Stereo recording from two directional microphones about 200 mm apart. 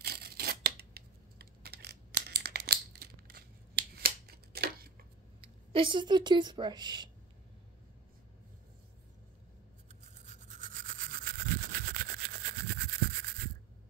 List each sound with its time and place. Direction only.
0.0 s tearing: 50° right (ahead or behind)
5.7 s a woman's voice: 25° right (ahead or behind)
10.0 s toothbrush: 35° right (ahead or behind); by 12.9 s 55° right (ahead or behind)